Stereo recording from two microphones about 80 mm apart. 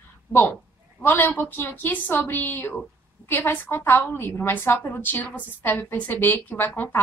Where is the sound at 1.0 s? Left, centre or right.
Left.